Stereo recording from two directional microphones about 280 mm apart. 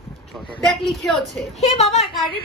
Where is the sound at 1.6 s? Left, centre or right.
Left.